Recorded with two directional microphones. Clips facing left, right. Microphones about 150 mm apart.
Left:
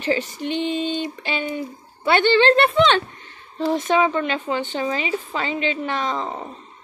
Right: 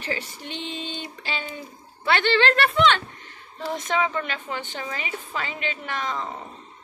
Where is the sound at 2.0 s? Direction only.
25° left (ahead or behind).